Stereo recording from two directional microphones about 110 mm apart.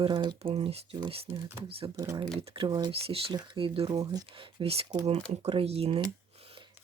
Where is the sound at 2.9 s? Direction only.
60° right (ahead or behind).